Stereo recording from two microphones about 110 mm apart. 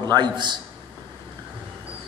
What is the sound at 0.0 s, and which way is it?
Speech, 40° right (ahead or behind).